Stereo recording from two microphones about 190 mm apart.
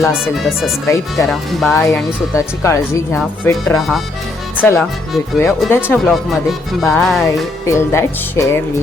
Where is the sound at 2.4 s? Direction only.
15° left (ahead or behind).